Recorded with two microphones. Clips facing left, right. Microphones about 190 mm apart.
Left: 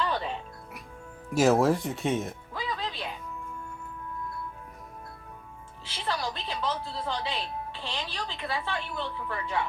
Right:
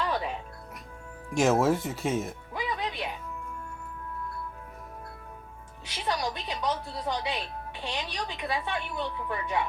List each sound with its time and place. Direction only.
1.3 s speech: centre (ahead or behind)
2.5 s music: 15° right (ahead or behind)
5.8 s music: 15° right (ahead or behind)
7.8 s a woman's voice: 15° right (ahead or behind)